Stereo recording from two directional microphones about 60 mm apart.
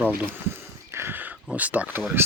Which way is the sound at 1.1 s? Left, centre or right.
Right.